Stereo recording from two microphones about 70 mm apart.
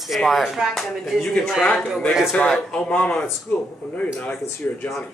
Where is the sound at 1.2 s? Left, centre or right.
Centre.